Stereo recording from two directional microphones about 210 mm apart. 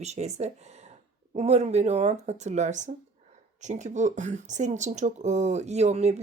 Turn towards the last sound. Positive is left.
turn(degrees=-30)  # may be behind; listen again after turning